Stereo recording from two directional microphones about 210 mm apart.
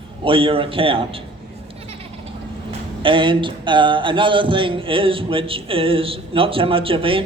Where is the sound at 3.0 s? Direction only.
25° right (ahead or behind).